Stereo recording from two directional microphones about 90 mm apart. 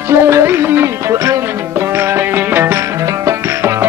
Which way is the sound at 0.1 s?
30° right (ahead or behind).